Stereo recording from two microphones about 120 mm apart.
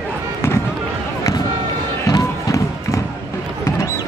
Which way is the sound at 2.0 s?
30° left (ahead or behind).